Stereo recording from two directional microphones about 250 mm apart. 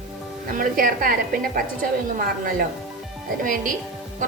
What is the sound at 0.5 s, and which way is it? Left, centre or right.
A woman's voice, right.